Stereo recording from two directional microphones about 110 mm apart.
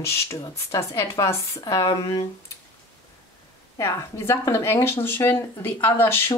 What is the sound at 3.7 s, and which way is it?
Speech, 25° left (ahead or behind).